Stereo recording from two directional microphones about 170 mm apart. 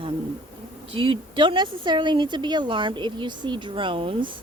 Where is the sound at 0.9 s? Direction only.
30° right (ahead or behind).